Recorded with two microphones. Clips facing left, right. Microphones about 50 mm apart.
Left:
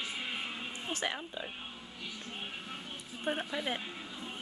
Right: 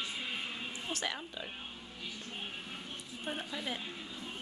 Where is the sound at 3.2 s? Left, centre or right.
Left.